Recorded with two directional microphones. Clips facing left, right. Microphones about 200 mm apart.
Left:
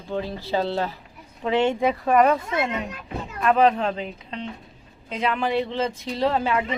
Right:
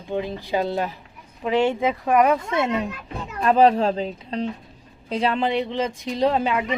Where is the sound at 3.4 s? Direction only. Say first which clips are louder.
Right 2 dB; 30° right (ahead or behind).